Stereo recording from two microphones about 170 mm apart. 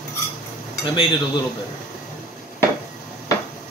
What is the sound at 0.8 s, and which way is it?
Speech, 25° left (ahead or behind).